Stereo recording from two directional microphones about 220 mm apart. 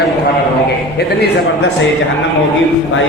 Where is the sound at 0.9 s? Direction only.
50° left (ahead or behind).